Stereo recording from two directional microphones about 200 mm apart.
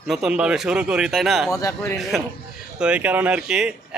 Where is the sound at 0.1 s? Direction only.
5° right (ahead or behind).